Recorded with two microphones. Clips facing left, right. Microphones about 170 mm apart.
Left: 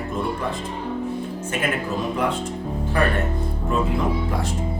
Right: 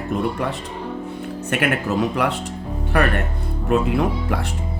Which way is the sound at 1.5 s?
75° right (ahead or behind).